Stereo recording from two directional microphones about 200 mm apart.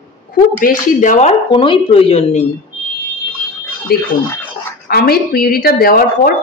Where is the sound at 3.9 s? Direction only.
50° left (ahead or behind).